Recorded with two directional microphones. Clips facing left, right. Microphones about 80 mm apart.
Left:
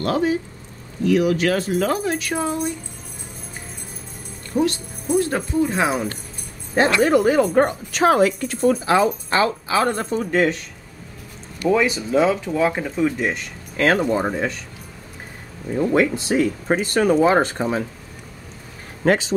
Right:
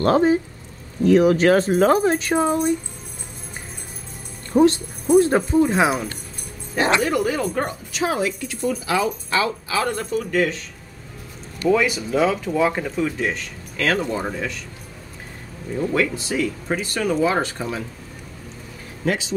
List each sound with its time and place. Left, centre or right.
0.0 s speech: right
4.5 s speech: right
5.7 s speech: centre
7.0 s speech: left
7.9 s speech: left
12.1 s speech: centre
13.7 s speech: left
15.7 s speech: left
19.0 s speech: left